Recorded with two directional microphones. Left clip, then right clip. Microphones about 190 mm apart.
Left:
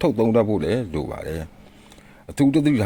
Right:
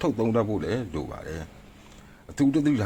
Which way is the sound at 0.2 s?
30° left (ahead or behind).